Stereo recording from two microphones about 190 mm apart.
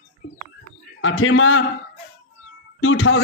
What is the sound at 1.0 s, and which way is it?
Speech, 90° left.